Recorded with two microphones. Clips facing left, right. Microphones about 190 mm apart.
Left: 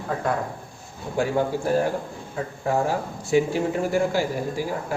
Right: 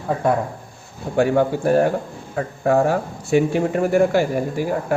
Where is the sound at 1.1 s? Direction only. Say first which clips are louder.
Right 6 dB; 65° right (ahead or behind).